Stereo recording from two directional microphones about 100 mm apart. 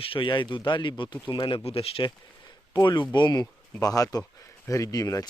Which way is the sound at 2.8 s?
50° left (ahead or behind).